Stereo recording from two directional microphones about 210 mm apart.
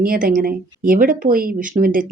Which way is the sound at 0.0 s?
45° right (ahead or behind).